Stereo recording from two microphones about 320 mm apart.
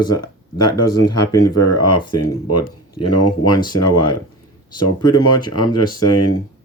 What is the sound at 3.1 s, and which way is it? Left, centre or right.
Speech, left.